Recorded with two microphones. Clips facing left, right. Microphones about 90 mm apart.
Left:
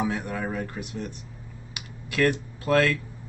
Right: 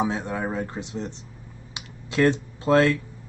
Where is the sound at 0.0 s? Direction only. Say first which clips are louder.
Right 2 dB; 20° right (ahead or behind).